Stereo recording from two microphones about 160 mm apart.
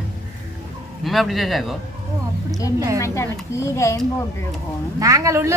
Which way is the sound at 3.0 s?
15° left (ahead or behind).